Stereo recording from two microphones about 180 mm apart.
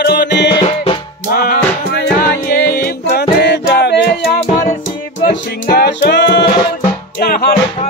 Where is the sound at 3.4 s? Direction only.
70° left (ahead or behind).